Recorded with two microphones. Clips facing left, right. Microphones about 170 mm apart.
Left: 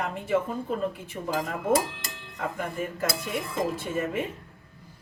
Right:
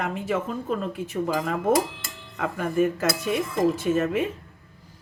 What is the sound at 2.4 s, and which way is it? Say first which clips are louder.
Speech: right 8 dB; 80° right.